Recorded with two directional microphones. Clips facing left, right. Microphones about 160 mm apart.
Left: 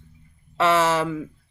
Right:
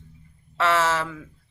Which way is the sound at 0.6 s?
15° left (ahead or behind).